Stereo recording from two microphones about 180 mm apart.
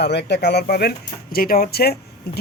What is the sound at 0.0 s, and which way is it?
Speech, 70° left (ahead or behind).